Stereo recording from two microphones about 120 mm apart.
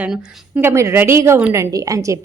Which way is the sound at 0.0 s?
10° right (ahead or behind).